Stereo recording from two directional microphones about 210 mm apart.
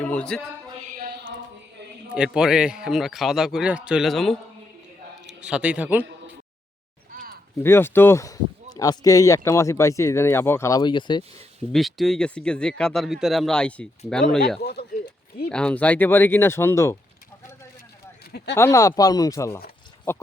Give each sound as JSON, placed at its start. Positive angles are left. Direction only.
{"t": 0.0, "sound": "music", "side_deg": 5}
{"t": 2.1, "sound": "a man's voice", "side_deg": -5}
{"t": 7.1, "sound": "a sound", "side_deg": -45}
{"t": 7.6, "sound": "speech", "side_deg": 10}
{"t": 11.7, "sound": "a man's voice", "side_deg": 0}
{"t": 14.6, "sound": "a sound", "side_deg": 50}
{"t": 15.4, "sound": "speech", "side_deg": 5}
{"t": 18.3, "sound": "speech", "side_deg": 50}
{"t": 18.5, "sound": "speech", "side_deg": 15}